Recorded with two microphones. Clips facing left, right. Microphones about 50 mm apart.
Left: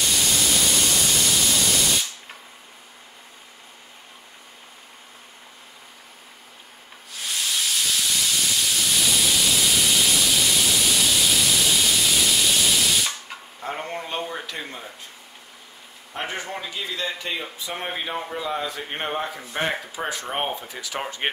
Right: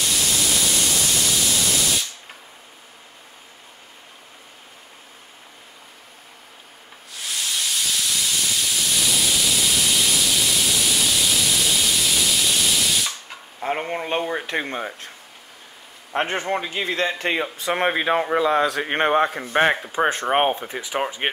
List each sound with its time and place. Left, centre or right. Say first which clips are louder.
0.0 s a sound: even; centre
7.2 s steam: even; centre
13.6 s a man's voice: right 5 dB; right
14.6 s speech: right 8 dB; right
16.1 s speech: right 7 dB; right
19.3 s speech: right 7 dB; right
20.5 s speech: right 4 dB; right
20.9 s speech: right 4 dB; centre